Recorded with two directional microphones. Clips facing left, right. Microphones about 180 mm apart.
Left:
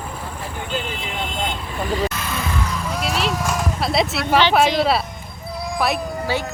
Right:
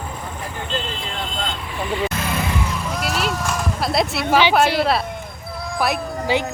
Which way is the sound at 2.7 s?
5° right (ahead or behind).